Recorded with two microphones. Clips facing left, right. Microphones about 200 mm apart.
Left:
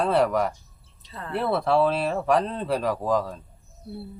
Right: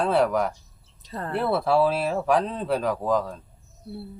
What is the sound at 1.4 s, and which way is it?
Speech, 5° right (ahead or behind).